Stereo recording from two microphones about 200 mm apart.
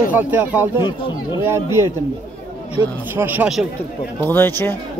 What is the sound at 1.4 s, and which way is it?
Speech, 15° right (ahead or behind).